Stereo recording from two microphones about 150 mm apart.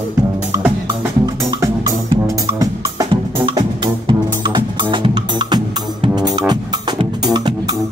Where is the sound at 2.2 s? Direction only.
20° right (ahead or behind).